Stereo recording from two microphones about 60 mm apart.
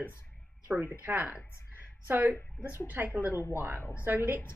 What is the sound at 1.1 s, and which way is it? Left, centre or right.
Speech, right.